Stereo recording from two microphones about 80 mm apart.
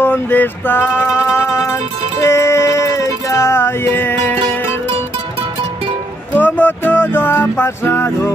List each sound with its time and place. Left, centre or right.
0.0 s music: left
6.3 s music: left